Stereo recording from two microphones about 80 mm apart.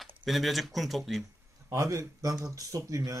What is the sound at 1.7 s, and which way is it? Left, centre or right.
Speech, right.